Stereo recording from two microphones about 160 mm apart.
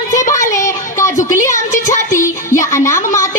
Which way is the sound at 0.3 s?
20° left (ahead or behind).